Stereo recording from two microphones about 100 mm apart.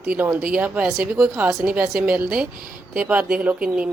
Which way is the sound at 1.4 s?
30° right (ahead or behind).